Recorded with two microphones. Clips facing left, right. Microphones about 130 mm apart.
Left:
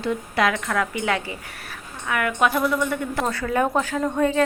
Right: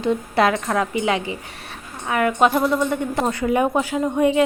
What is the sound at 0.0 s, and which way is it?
A woman's voice, 25° right (ahead or behind).